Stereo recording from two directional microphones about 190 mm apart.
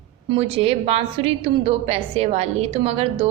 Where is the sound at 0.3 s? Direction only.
30° right (ahead or behind).